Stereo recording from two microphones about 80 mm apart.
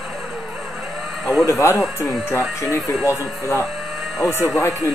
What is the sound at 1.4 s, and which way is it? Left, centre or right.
Speech, left.